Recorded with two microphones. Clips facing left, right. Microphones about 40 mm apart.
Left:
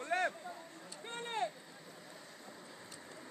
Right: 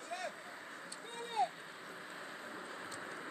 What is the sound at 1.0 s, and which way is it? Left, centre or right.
Speech, left.